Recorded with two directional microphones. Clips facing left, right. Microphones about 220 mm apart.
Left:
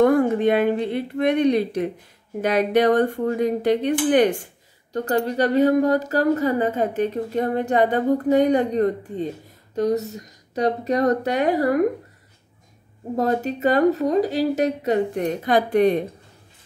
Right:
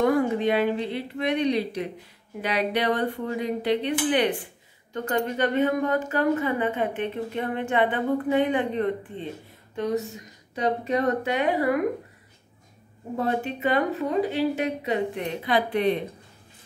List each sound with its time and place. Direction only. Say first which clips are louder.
0.0 s speech: left 5 dB; 50° left (ahead or behind)
13.1 s speech: left 5 dB; 40° left (ahead or behind)